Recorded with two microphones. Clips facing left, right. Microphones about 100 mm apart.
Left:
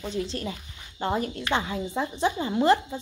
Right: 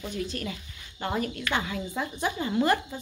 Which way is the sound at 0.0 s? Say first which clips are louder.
Left 2 dB; 25° left (ahead or behind).